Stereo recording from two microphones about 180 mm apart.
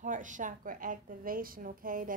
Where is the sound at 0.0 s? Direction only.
45° right (ahead or behind).